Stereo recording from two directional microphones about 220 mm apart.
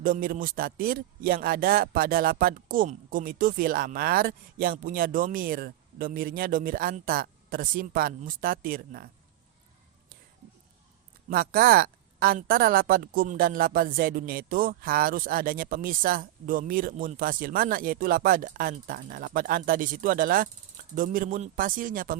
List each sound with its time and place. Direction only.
0.0 s a woman's voice: 40° right (ahead or behind)
11.3 s a woman's voice: 40° right (ahead or behind)